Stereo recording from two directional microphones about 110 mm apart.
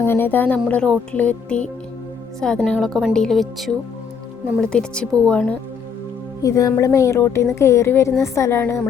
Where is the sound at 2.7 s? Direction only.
5° left (ahead or behind).